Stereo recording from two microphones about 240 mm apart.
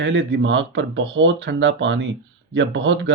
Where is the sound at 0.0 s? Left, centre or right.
Right.